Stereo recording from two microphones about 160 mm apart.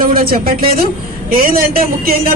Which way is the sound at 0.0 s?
65° right (ahead or behind).